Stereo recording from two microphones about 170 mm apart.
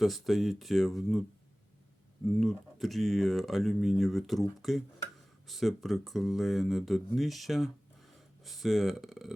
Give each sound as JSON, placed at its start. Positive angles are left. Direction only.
{"t": 0.0, "sound": "speech", "side_deg": 0}
{"t": 2.2, "sound": "speech", "side_deg": 0}